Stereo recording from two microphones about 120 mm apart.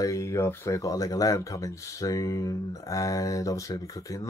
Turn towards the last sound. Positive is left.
turn(degrees=30)  # may be behind; listen again after turning